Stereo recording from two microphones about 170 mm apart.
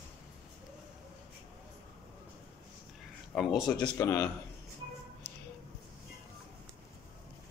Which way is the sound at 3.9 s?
15° left (ahead or behind).